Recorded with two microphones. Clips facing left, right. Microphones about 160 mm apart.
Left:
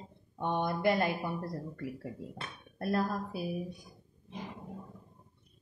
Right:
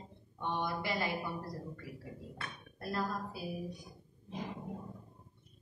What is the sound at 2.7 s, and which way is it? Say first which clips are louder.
Speech: left 6 dB; 55° left (ahead or behind).